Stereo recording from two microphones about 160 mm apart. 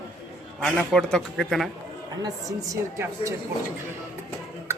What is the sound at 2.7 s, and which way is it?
Speech, 20° right (ahead or behind).